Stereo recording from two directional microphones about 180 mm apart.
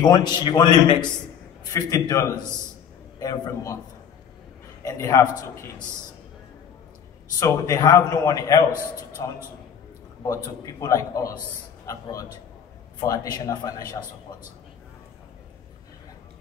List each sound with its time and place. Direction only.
0.0 s a man's voice: 25° left (ahead or behind)
4.8 s a man's voice: 20° left (ahead or behind)
7.3 s a man's voice: 20° left (ahead or behind)